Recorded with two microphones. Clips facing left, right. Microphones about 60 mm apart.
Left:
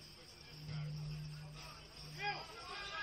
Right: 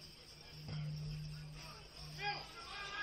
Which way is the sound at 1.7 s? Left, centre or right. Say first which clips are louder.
Even; centre.